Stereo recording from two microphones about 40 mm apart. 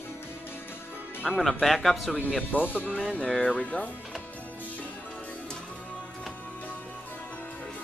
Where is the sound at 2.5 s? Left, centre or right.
Left.